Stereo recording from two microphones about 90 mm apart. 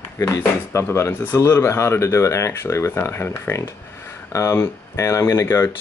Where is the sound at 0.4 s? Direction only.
30° left (ahead or behind).